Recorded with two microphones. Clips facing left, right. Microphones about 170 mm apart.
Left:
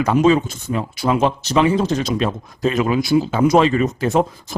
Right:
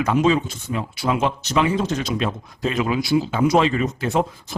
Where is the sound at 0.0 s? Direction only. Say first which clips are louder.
Left 4 dB; 40° left (ahead or behind).